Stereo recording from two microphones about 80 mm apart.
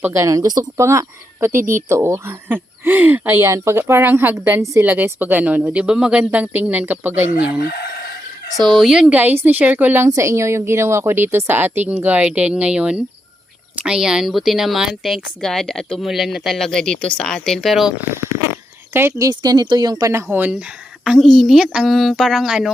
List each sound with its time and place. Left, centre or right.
0.1 s speech: right
0.8 s speech: right
8.5 s speech: centre; by 10.1 s right
10.1 s speech: right; by 16.0 s centre
16.0 s speech: centre
19.3 s speech: right
20.1 s speech: right
20.5 s speech: centre